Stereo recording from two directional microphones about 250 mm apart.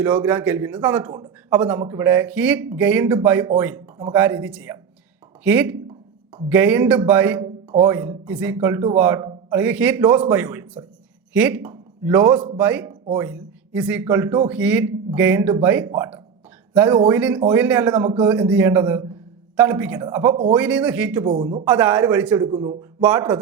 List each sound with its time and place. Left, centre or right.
0.0 s a man's voice: centre
20.6 s a man's voice: centre
21.2 s speech: centre
21.6 s speech: centre
22.4 s speech: right
22.8 s a man's voice: centre